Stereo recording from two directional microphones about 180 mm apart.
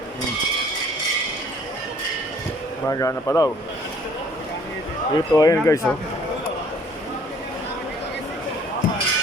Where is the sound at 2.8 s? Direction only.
15° left (ahead or behind).